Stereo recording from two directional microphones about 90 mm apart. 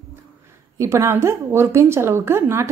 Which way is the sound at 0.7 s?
30° right (ahead or behind).